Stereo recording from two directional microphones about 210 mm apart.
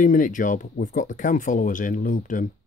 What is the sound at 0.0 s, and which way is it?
Speech, 40° left (ahead or behind).